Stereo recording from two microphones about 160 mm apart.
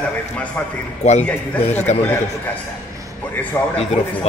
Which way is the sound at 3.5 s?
10° left (ahead or behind).